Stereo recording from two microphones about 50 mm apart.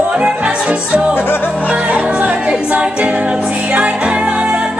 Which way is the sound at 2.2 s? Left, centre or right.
Right.